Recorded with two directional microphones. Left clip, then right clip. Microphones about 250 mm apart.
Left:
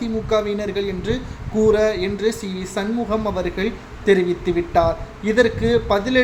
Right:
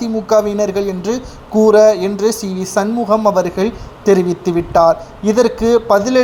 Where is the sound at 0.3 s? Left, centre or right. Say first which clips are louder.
Right 8 dB; right.